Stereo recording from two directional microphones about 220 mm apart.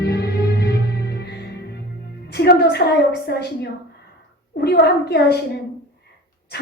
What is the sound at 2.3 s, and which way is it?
A woman's voice, 50° left (ahead or behind).